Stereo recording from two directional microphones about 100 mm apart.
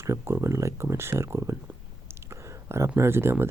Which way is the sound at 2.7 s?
25° right (ahead or behind).